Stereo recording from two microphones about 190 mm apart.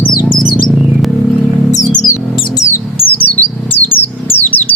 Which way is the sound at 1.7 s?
40° left (ahead or behind).